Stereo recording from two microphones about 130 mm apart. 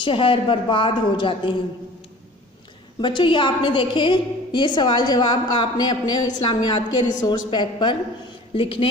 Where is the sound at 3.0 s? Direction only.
40° left (ahead or behind).